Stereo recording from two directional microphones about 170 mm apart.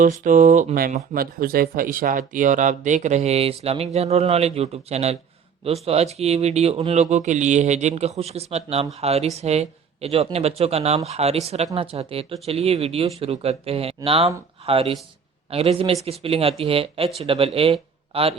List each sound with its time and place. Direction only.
0.0 s speech: 50° right (ahead or behind); by 18.3 s 35° right (ahead or behind)